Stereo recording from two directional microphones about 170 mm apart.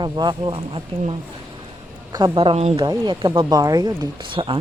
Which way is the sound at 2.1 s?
25° right (ahead or behind).